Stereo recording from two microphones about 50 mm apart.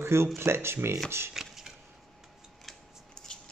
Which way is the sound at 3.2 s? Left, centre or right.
Centre.